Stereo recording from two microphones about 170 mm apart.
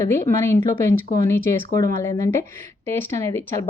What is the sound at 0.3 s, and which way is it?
Speech, 15° left (ahead or behind).